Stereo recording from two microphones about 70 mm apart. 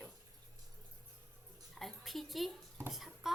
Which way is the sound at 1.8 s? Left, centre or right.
Centre.